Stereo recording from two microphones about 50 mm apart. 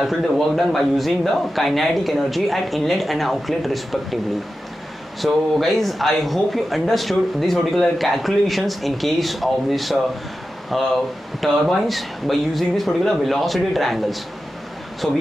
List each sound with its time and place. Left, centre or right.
0.6 s speech: centre
5.2 s speech: centre
15.0 s speech: centre